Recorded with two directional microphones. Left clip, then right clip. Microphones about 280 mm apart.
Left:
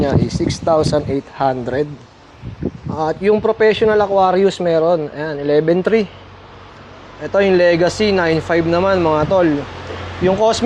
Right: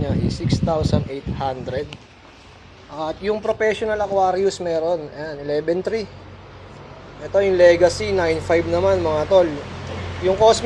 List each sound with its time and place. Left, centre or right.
0.0 s speech: left
3.0 s speech: left
7.3 s speech: left